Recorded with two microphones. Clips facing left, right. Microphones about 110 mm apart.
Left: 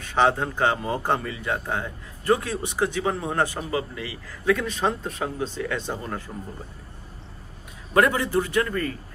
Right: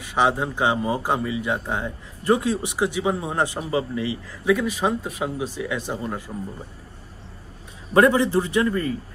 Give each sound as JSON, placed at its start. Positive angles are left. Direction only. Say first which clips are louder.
{"t": 0.0, "sound": "speech", "louder": "even", "side_deg": -15}
{"t": 7.9, "sound": "a man's voice", "louder": "right 4 dB", "side_deg": -20}